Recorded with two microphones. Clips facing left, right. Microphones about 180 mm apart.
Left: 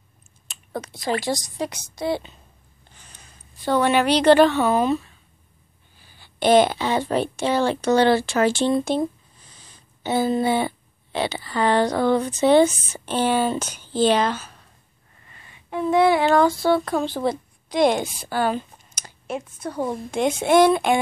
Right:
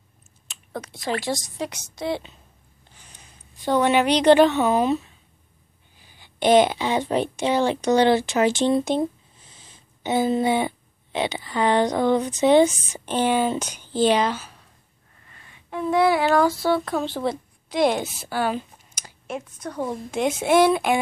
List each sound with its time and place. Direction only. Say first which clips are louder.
0.5 s a sound: left 1 dB; centre (ahead or behind)
1.2 s speech: left 2 dB; centre (ahead or behind)
3.0 s a woman's voice: left 1 dB; 15° right (ahead or behind)
15.2 s speech: left 2 dB; 5° left (ahead or behind); by 19.1 s 10° right (ahead or behind)
19.2 s speech: left 2 dB; 5° left (ahead or behind)